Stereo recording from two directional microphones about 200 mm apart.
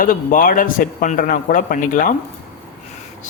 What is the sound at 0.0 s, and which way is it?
A man's voice, 45° left (ahead or behind).